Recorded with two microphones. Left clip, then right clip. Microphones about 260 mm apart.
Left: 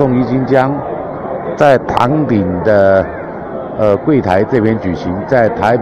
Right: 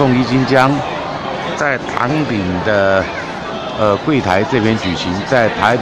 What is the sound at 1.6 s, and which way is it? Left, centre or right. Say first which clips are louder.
Speech: left 9 dB; centre.